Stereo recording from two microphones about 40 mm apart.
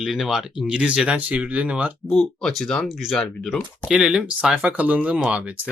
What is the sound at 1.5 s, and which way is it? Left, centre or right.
Speech, right.